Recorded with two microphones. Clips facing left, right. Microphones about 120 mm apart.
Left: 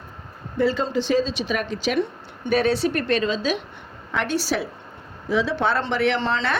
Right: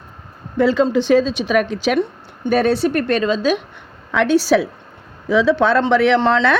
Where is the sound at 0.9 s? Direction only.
60° right (ahead or behind).